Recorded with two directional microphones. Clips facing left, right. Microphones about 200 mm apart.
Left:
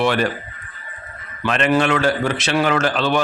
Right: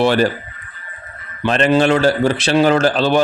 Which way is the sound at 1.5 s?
35° right (ahead or behind).